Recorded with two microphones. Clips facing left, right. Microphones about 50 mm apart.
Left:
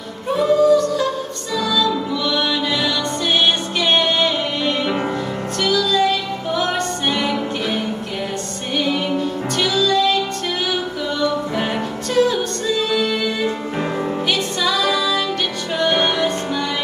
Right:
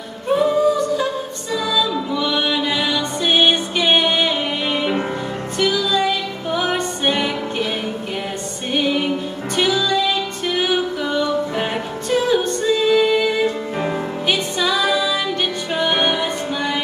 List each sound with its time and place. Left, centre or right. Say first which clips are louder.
0.3 s music: left 2 dB; centre
8.7 s music: even; centre
13.7 s music: even; centre
14.2 s music: right 3 dB; centre